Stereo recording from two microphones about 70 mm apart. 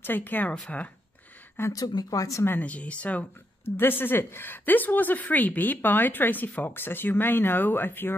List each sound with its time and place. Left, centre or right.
0.0 s a woman's voice: left
1.7 s speech: left
2.6 s a woman's voice: centre
3.6 s a woman's voice: left